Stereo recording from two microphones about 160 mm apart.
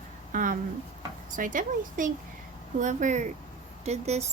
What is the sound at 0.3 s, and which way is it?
A woman's voice, 55° right (ahead or behind).